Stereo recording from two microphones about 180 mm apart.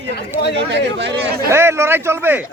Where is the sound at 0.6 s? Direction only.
80° right.